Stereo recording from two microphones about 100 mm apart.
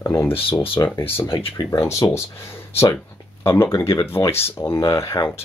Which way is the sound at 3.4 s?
30° left (ahead or behind).